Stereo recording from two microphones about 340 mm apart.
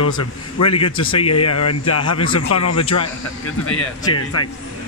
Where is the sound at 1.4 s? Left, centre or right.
Left.